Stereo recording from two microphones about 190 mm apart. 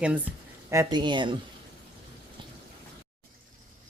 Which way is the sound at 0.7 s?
20° right (ahead or behind).